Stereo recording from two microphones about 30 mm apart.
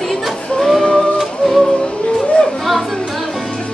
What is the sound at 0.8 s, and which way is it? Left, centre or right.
Music, left.